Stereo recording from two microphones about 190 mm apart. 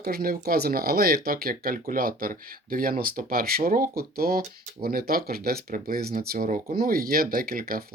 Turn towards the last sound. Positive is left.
turn(degrees=-50)  # may be behind; listen again after turning